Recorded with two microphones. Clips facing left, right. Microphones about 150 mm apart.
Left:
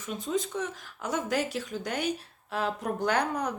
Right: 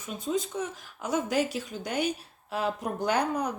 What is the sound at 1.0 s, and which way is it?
Speech, centre (ahead or behind).